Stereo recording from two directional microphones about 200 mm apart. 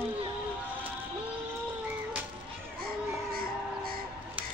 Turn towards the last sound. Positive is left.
turn(degrees=-50)  # may be behind; listen again after turning